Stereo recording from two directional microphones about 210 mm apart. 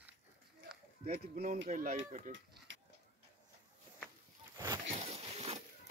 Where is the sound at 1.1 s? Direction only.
40° right (ahead or behind).